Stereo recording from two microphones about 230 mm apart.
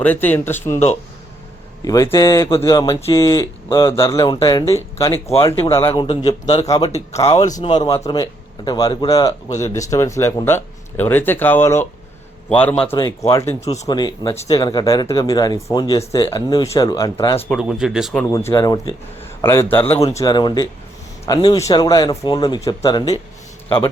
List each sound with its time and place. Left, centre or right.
0.0 s speech: centre
1.8 s speech: centre
5.8 s a man's voice: left
6.7 s speech: centre
17.5 s speech: centre
18.3 s a man's voice: centre